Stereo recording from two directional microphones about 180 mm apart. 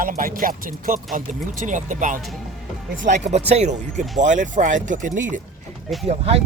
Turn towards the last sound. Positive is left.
turn(degrees=-35)  # may be behind; listen again after turning